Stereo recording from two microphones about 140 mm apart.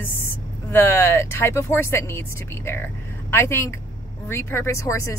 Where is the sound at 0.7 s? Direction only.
15° left (ahead or behind).